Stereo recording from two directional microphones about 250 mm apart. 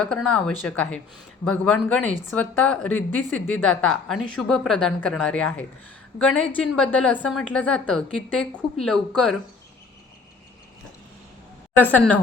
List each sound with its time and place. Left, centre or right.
0.0 s a woman's voice: centre
11.8 s a woman's voice: centre